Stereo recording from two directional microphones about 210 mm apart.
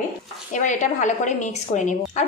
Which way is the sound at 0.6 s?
35° left (ahead or behind).